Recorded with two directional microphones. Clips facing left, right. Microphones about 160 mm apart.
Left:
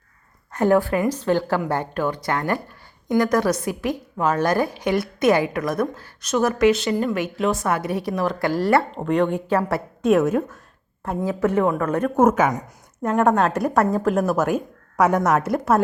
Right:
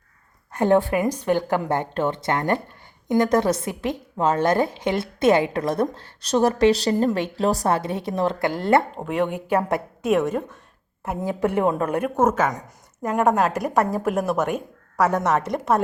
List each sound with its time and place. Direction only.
0.5 s a woman's voice: 20° right (ahead or behind)
9.0 s a woman's voice: 5° right (ahead or behind)
10.0 s a woman's voice: centre (ahead or behind)
11.0 s a woman's voice: 15° right (ahead or behind)
12.1 s a woman's voice: 10° left (ahead or behind)
13.0 s a woman's voice: 5° right (ahead or behind)
14.9 s a woman's voice: 15° left (ahead or behind)